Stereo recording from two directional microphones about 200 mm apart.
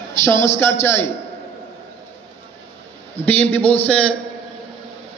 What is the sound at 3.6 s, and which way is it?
Speech, 30° left (ahead or behind).